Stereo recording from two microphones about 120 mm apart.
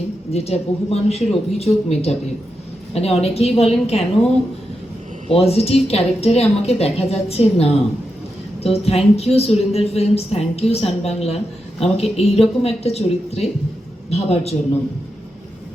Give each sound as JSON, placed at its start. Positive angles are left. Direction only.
{"t": 0.3, "sound": "a woman's voice", "side_deg": 60}
{"t": 5.3, "sound": "a woman's voice", "side_deg": 55}